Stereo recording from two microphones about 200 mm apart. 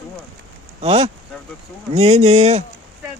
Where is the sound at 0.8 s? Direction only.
30° right (ahead or behind).